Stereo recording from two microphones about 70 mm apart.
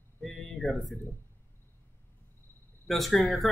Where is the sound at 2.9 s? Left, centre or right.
Centre.